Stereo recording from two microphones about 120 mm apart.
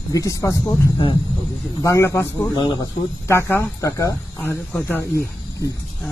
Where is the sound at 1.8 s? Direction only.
25° left (ahead or behind).